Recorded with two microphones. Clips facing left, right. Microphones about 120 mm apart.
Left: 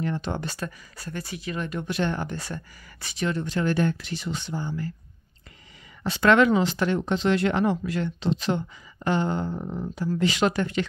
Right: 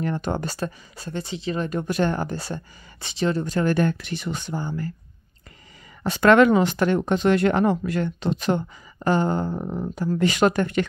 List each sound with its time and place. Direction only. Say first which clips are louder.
0.0 s speech: right 3 dB; 45° right (ahead or behind)
6.0 s speech: right 4 dB; 50° right (ahead or behind)